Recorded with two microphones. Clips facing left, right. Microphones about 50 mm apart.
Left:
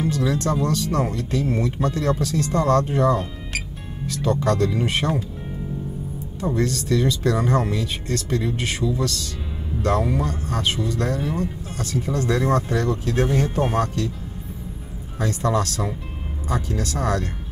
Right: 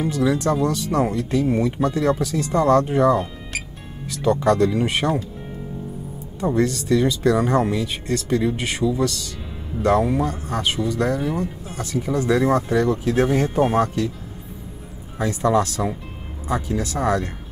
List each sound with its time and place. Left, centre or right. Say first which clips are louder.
0.0 s speech: right 2 dB; centre
6.4 s speech: right 3 dB; centre
15.1 s speech: right 3 dB; centre